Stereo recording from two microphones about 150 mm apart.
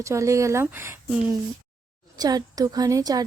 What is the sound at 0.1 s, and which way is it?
Speech, 20° right (ahead or behind).